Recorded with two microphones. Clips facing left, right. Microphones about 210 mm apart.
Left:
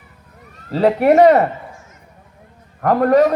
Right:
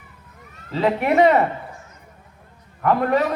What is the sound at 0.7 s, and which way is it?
Speech, 40° left (ahead or behind).